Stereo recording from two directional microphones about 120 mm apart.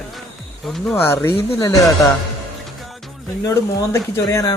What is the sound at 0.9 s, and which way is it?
Speech, 20° left (ahead or behind).